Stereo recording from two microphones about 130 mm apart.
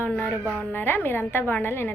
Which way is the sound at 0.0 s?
15° left (ahead or behind).